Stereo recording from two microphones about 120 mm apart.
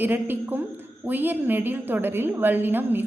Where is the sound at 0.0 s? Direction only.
15° right (ahead or behind).